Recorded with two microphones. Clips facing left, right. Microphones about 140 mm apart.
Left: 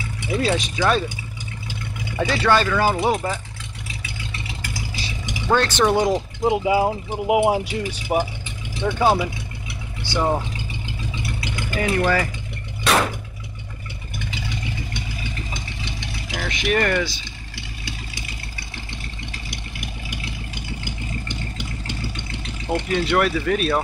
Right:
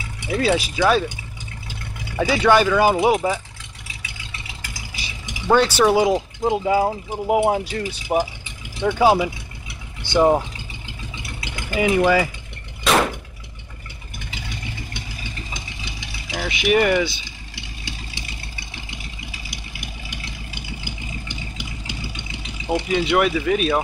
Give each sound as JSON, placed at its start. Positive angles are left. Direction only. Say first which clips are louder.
{"t": 0.3, "sound": "speech", "louder": "right 2 dB", "side_deg": -5}
{"t": 2.1, "sound": "speech", "louder": "right 3 dB", "side_deg": -10}
{"t": 5.5, "sound": "speech", "louder": "right 3 dB", "side_deg": -10}
{"t": 8.8, "sound": "speech", "louder": "right 3 dB", "side_deg": -5}
{"t": 10.0, "sound": "speech", "louder": "right 6 dB", "side_deg": -20}
{"t": 11.8, "sound": "speech", "louder": "right 4 dB", "side_deg": -10}
{"t": 15.8, "sound": "vehicle", "louder": "left 4 dB", "side_deg": -5}
{"t": 17.6, "sound": "vehicle", "louder": "left 1 dB", "side_deg": -20}
{"t": 19.3, "sound": "vehicle", "louder": "left 2 dB", "side_deg": 0}